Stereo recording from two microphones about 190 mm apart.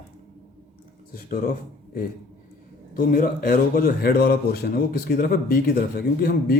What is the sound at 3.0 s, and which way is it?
A man's voice, 50° left (ahead or behind).